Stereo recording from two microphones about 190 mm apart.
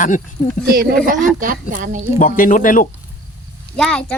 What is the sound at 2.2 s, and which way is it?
Speech, 45° left (ahead or behind).